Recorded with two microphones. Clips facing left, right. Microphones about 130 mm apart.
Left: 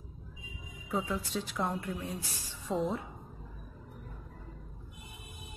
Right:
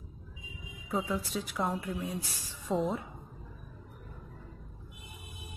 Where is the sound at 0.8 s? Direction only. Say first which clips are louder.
Right 1 dB; centre (ahead or behind).